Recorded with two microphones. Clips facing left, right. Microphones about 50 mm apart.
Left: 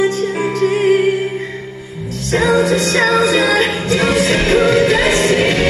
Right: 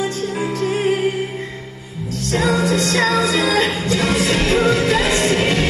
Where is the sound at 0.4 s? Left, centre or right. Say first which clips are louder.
Left 4 dB; centre.